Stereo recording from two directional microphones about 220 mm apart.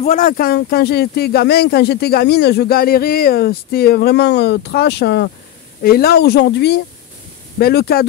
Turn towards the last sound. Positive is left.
turn(degrees=45)  # may be behind; listen again after turning